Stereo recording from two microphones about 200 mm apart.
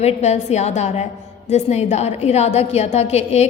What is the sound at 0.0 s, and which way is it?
A woman's voice, 35° left (ahead or behind).